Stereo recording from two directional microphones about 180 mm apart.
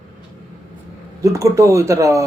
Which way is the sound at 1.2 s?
15° right (ahead or behind).